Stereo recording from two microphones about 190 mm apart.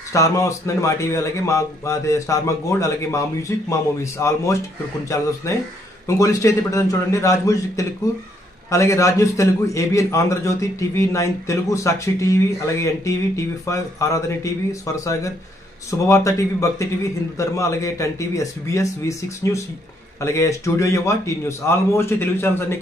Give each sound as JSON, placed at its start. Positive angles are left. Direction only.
{"t": 0.1, "sound": "a man's voice", "side_deg": 15}